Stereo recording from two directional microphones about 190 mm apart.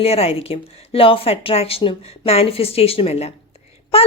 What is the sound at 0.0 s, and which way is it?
A woman's voice, 30° left (ahead or behind).